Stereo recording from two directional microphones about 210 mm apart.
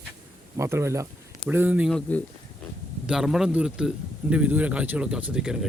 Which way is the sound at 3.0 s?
5° right (ahead or behind).